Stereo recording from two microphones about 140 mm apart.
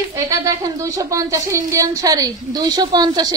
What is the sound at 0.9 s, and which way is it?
A woman's voice, 20° right (ahead or behind).